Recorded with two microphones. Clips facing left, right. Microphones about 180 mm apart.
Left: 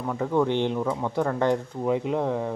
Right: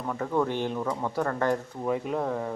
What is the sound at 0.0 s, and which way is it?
Speech, 5° left (ahead or behind).